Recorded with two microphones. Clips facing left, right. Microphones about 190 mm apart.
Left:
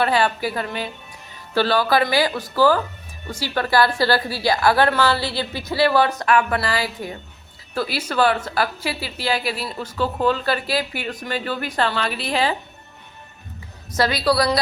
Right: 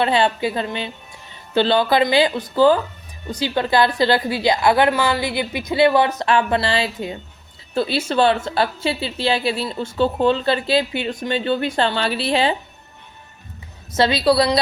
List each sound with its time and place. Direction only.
0.0 s a woman's voice: 25° right (ahead or behind)
13.9 s a woman's voice: 25° right (ahead or behind)